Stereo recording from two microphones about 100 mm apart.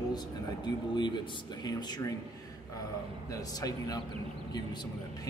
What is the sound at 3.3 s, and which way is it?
Speech, 35° left (ahead or behind).